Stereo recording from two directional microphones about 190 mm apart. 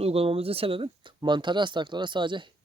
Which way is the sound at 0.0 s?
30° right (ahead or behind).